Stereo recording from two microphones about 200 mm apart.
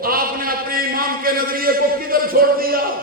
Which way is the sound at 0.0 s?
45° right (ahead or behind).